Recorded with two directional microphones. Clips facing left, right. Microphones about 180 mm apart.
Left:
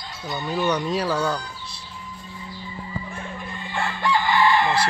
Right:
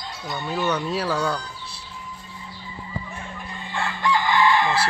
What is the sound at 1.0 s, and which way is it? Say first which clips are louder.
Speech: left 1 dB; 10° left (ahead or behind).